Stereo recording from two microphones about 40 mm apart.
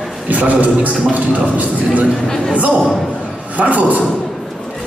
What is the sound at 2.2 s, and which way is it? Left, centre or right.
Speech, centre.